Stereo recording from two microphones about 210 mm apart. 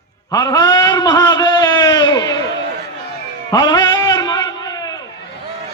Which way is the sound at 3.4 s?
20° left (ahead or behind).